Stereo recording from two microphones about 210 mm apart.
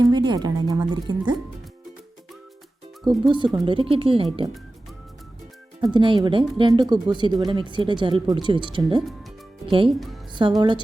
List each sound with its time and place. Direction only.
0.0 s speech: 20° right (ahead or behind)
3.0 s speech: 20° right (ahead or behind)
5.8 s speech: 20° right (ahead or behind)
10.6 s speech: 20° right (ahead or behind)